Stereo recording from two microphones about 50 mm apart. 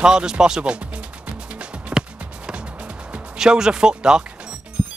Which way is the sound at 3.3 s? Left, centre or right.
Centre.